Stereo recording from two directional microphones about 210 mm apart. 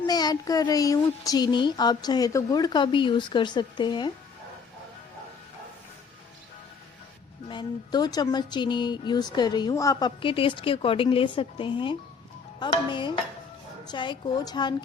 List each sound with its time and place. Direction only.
0.0 s a woman's voice: 20° left (ahead or behind)
7.4 s a woman's voice: 20° left (ahead or behind)